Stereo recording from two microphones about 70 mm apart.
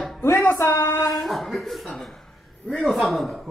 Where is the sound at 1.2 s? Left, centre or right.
Centre.